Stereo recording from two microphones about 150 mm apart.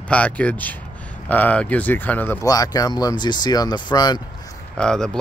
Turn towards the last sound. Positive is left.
turn(degrees=5)  # may be behind; listen again after turning